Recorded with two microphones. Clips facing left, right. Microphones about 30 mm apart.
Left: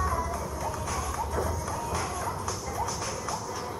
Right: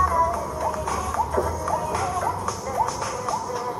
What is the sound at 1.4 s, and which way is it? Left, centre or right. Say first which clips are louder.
Music: right 7 dB; right.